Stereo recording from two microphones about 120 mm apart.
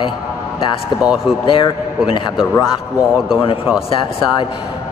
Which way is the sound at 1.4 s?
45° left (ahead or behind).